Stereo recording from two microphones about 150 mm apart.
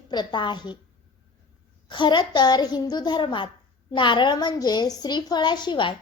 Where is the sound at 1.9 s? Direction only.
30° left (ahead or behind).